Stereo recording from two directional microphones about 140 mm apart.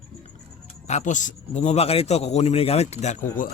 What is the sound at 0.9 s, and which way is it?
A man's voice, 60° left (ahead or behind).